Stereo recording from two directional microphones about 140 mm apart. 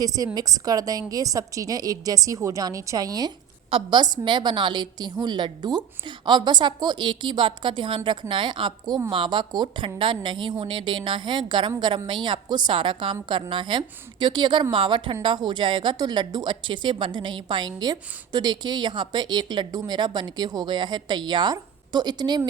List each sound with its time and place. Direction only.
0.3 s a woman's voice: 25° right (ahead or behind)